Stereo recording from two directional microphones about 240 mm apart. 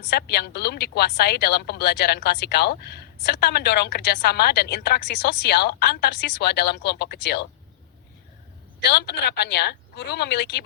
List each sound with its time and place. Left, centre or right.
0.1 s a woman's voice: left
8.8 s a woman's voice: left